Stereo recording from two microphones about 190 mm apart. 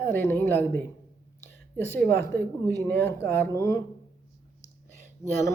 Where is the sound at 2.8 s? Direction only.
10° left (ahead or behind).